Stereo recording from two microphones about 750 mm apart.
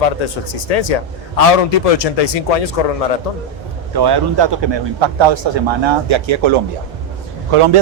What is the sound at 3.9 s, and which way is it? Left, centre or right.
Speech, right.